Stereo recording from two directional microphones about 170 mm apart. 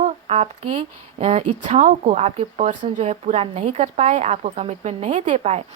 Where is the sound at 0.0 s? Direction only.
40° right (ahead or behind).